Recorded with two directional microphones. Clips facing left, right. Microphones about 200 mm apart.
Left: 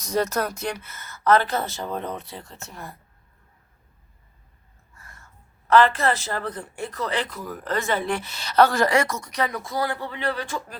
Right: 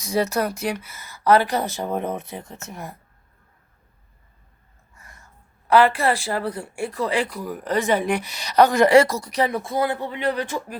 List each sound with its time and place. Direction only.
0.0 s speech: 10° right (ahead or behind)
4.9 s a sound: 15° right (ahead or behind)
5.6 s speech: 10° right (ahead or behind)
8.9 s speech: 30° right (ahead or behind)